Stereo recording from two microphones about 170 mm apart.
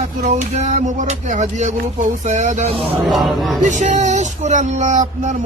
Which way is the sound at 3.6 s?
45° right (ahead or behind).